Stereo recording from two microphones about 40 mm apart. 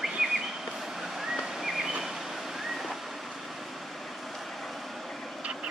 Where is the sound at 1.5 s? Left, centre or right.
Centre.